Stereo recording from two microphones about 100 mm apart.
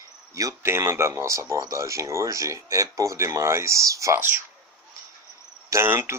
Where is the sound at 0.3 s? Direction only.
30° right (ahead or behind).